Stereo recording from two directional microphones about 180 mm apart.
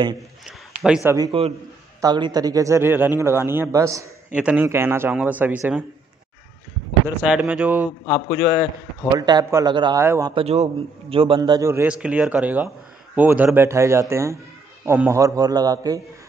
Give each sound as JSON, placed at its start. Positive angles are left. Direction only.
{"t": 0.8, "sound": "speech", "side_deg": -5}
{"t": 1.1, "sound": "a man's voice", "side_deg": -20}
{"t": 7.2, "sound": "speech", "side_deg": -5}
{"t": 9.1, "sound": "a man's voice", "side_deg": -20}
{"t": 10.3, "sound": "a man's voice", "side_deg": -35}